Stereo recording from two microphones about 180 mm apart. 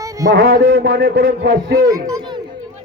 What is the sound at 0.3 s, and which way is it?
A man's voice, 60° right (ahead or behind).